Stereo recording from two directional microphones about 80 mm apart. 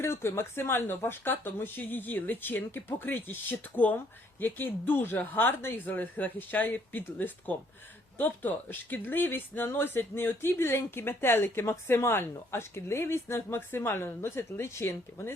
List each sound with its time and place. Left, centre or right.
0.0 s speech: left